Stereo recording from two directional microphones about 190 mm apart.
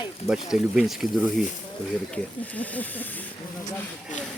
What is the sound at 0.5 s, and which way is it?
Speech, centre (ahead or behind).